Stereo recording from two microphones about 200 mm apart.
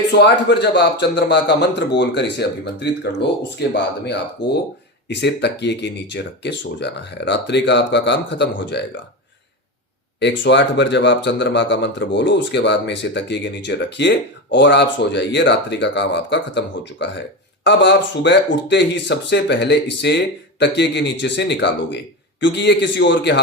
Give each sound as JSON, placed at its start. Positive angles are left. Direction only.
{"t": 0.1, "sound": "speech", "side_deg": 55}
{"t": 10.2, "sound": "speech", "side_deg": 60}